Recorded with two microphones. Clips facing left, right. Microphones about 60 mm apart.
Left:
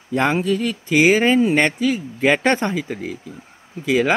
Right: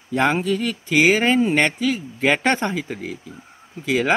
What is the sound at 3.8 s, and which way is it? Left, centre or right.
Speech, left.